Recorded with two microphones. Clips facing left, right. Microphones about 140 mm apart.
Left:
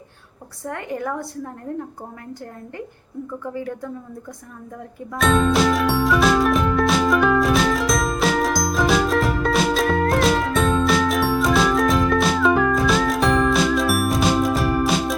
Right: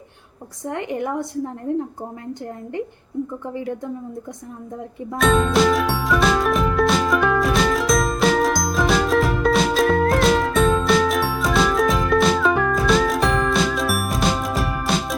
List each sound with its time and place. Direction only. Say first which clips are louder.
0.6 s a woman's voice: right 2 dB; 20° right (ahead or behind)
3.5 s a woman's voice: right 1 dB; 20° right (ahead or behind)
5.1 s music: right 1 dB; centre (ahead or behind)